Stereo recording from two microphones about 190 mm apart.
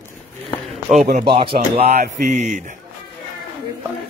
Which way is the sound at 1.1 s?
30° right (ahead or behind).